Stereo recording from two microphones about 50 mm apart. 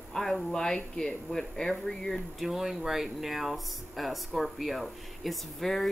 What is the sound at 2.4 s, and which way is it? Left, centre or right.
Speech, centre.